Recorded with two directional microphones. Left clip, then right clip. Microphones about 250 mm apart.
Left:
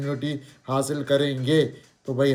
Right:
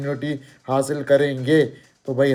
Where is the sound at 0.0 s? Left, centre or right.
Right.